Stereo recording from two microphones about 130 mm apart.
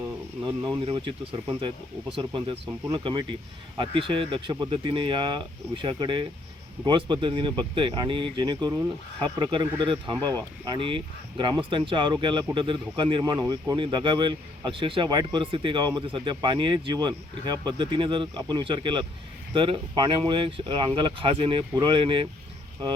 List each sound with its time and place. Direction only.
0.9 s speech: 40° right (ahead or behind)